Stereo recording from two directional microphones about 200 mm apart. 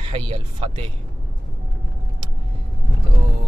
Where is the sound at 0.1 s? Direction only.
30° right (ahead or behind).